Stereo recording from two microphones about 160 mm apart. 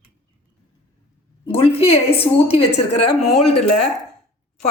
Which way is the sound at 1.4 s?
35° left (ahead or behind).